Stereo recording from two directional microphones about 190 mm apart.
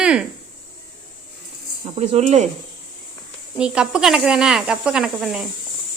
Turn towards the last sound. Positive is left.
turn(degrees=0)  # may be behind; listen again after turning